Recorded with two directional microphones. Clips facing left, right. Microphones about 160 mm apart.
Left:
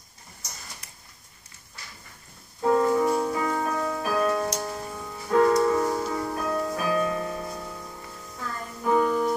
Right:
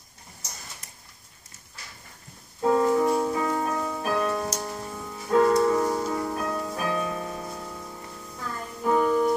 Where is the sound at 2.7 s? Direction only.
10° right (ahead or behind).